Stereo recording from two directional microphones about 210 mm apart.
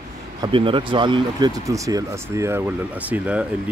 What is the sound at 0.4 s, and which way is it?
Speech, 25° right (ahead or behind).